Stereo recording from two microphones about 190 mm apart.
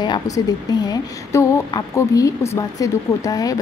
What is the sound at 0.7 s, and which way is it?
A woman's voice, 20° left (ahead or behind).